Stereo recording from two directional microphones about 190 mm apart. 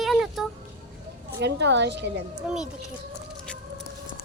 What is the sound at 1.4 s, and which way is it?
Speech, 65° right (ahead or behind).